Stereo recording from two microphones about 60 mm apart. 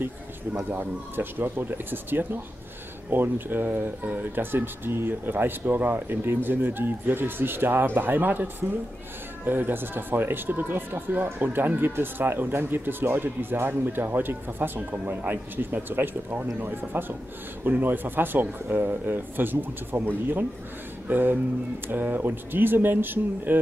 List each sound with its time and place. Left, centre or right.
0.7 s speech: right